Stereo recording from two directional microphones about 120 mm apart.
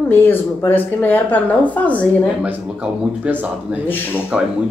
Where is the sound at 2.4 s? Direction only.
15° right (ahead or behind).